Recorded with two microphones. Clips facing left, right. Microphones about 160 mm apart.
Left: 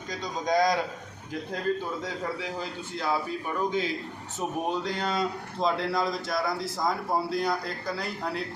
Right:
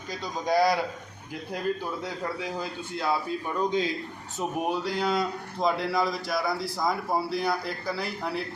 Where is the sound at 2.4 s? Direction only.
15° right (ahead or behind).